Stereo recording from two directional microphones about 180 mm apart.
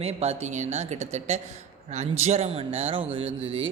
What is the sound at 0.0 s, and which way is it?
Speech, 35° right (ahead or behind).